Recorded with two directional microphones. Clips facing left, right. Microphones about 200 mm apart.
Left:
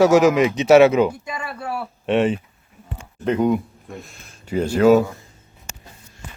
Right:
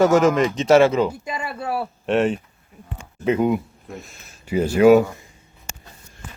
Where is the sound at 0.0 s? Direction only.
Centre (ahead or behind).